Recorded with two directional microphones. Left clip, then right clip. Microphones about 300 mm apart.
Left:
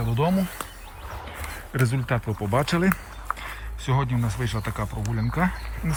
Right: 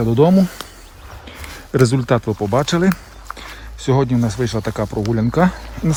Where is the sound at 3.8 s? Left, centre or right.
Centre.